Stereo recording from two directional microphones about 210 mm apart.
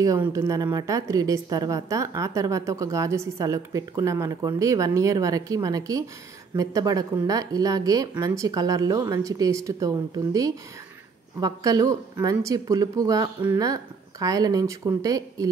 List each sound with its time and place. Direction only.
0.0 s a woman's voice: 15° right (ahead or behind)